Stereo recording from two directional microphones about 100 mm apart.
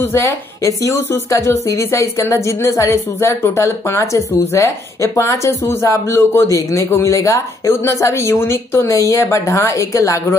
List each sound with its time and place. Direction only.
0.0 s a woman's voice: 25° left (ahead or behind)